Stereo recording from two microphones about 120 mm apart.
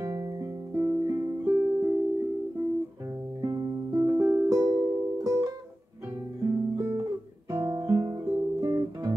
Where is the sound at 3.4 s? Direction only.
30° right (ahead or behind).